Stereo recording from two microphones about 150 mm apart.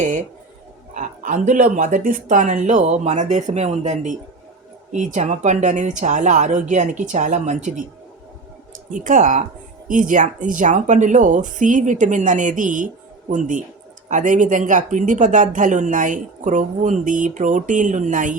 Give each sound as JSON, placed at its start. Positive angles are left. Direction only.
{"t": 0.0, "sound": "speech", "side_deg": -55}
{"t": 8.9, "sound": "speech", "side_deg": -60}